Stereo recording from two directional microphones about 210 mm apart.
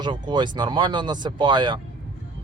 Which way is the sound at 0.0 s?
20° right (ahead or behind).